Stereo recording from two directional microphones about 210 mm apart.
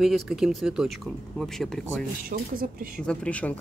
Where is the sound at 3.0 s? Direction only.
5° left (ahead or behind).